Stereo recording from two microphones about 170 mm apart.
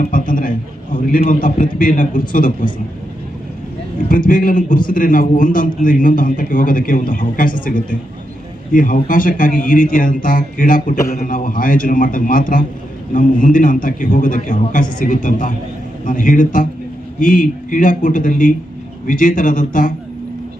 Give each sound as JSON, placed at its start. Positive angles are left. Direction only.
{"t": 0.0, "sound": "a sound", "side_deg": 55}
{"t": 1.1, "sound": "a man's voice", "side_deg": 55}
{"t": 4.3, "sound": "a man's voice", "side_deg": 50}